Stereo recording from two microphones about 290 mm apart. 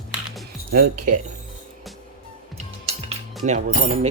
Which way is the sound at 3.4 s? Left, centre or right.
Right.